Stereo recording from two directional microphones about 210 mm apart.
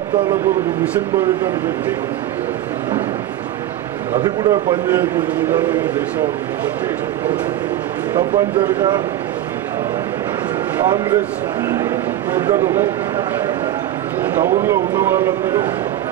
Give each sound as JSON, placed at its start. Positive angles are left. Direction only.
{"t": 4.2, "sound": "speech", "side_deg": -20}
{"t": 8.1, "sound": "speech", "side_deg": -20}
{"t": 15.0, "sound": "speech", "side_deg": -10}